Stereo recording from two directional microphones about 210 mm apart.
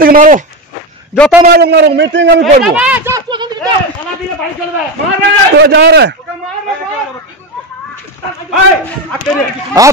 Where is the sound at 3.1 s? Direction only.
20° right (ahead or behind).